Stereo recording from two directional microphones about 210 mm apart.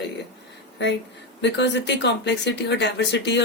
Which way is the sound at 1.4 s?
55° left (ahead or behind).